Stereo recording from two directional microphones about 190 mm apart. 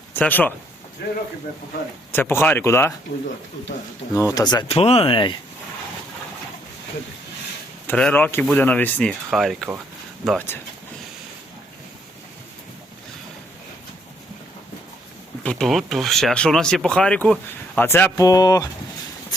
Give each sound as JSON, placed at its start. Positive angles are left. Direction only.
{"t": 0.1, "sound": "speech", "side_deg": 10}
{"t": 1.0, "sound": "speech", "side_deg": 55}
{"t": 2.1, "sound": "speech", "side_deg": 10}
{"t": 4.1, "sound": "speech", "side_deg": 15}
{"t": 4.7, "sound": "speech", "side_deg": 30}
{"t": 7.9, "sound": "speech", "side_deg": 5}
{"t": 15.4, "sound": "speech", "side_deg": 0}